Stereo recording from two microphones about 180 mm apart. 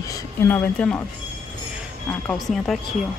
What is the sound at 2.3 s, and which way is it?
Speech, centre (ahead or behind).